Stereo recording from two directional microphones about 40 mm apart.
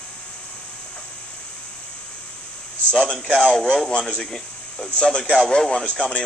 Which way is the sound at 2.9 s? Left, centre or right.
Centre.